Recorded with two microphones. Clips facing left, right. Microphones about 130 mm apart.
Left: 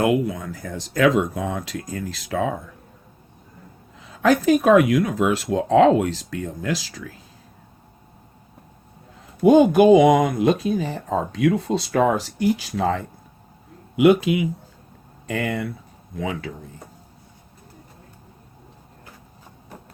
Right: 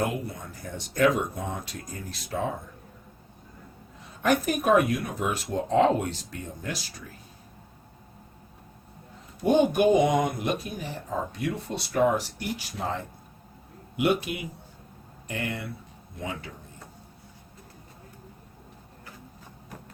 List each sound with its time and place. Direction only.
0.0 s speech: 90° left
4.0 s speech: 90° left
9.4 s speech: 90° left
13.9 s speech: 90° left
16.1 s speech: 90° left